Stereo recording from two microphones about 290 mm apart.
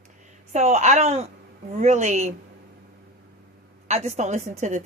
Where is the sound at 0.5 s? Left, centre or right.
Right.